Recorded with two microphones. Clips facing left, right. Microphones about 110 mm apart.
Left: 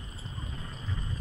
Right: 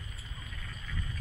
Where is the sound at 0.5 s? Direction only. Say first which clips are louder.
Left 1 dB; 25° left (ahead or behind).